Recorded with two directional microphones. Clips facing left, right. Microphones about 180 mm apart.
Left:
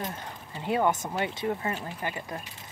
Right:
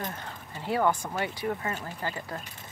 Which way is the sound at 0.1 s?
20° left (ahead or behind).